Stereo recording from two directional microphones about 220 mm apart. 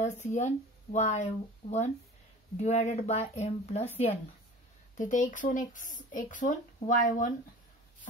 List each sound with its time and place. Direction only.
0.0 s speech: 30° left (ahead or behind)